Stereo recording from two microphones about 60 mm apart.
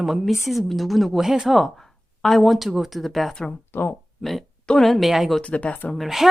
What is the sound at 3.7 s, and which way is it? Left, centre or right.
Speech, left.